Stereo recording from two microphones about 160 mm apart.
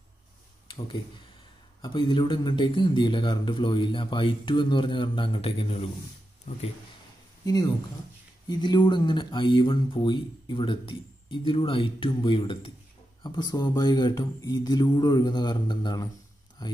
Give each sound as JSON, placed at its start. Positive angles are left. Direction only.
{"t": 0.7, "sound": "a man's voice", "side_deg": 30}
{"t": 7.4, "sound": "a man's voice", "side_deg": 25}